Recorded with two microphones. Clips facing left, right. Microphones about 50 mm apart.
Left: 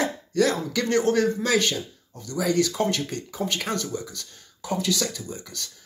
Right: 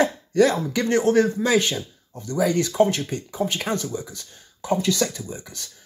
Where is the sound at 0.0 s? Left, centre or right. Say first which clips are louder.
Right 4 dB; right.